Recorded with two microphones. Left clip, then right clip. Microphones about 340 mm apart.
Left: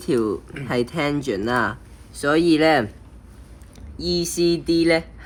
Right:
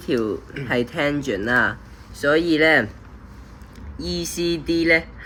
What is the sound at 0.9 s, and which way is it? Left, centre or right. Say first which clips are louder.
Speech: right 1 dB; left.